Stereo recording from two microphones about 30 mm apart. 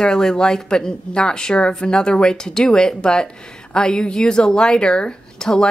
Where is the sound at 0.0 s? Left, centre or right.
Left.